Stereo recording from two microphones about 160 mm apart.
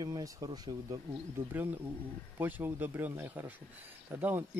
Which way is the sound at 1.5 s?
10° right (ahead or behind).